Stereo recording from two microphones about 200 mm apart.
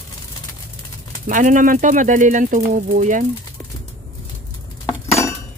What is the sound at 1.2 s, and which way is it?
Speech, 40° right (ahead or behind).